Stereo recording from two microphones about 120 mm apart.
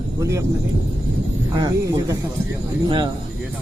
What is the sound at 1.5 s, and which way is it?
Speech, 30° right (ahead or behind).